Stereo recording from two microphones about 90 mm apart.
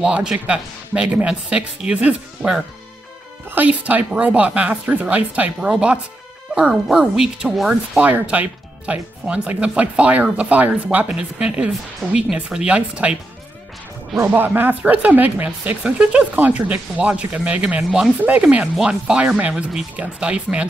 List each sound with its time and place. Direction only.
0.0 s speech: 10° right (ahead or behind)
8.0 s speech: 15° right (ahead or behind)
14.2 s speech: 20° right (ahead or behind)